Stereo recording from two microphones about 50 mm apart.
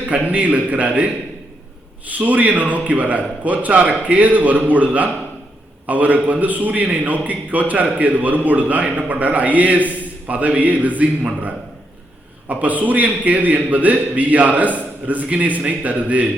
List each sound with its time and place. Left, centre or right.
0.3 s a man's voice: right
12.5 s a man's voice: right